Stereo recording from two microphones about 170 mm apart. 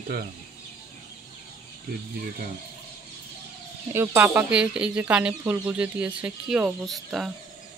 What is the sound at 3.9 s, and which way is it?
Speech, 15° right (ahead or behind).